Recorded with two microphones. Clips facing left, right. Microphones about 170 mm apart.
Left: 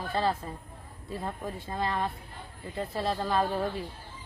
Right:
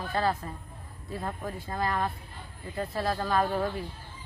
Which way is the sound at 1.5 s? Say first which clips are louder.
Right 1 dB; 25° left (ahead or behind).